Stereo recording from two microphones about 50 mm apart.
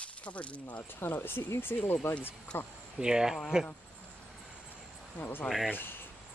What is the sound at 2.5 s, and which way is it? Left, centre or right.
Speech, left.